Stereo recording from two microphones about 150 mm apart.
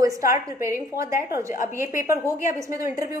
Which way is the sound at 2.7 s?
20° right (ahead or behind).